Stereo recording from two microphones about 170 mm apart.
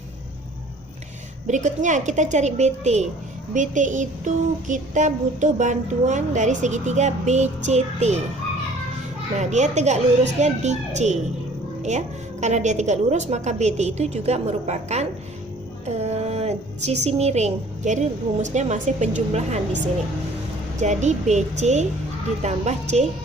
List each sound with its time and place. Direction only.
1.5 s speech: 45° right (ahead or behind)
9.4 s a woman's voice: 45° right (ahead or behind)